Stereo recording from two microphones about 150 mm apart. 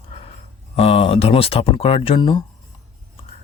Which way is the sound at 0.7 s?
40° left (ahead or behind).